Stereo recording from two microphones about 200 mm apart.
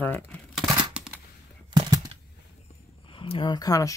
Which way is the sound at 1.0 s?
5° right (ahead or behind).